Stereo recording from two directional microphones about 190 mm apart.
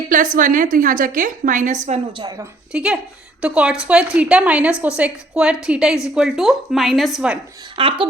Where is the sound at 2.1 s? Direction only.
20° right (ahead or behind); by 7.3 s 5° right (ahead or behind).